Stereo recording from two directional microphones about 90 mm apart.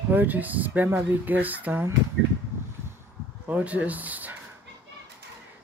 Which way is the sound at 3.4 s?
15° right (ahead or behind).